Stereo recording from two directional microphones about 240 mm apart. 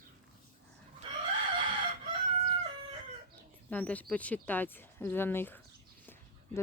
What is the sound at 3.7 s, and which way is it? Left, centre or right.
Speech, centre.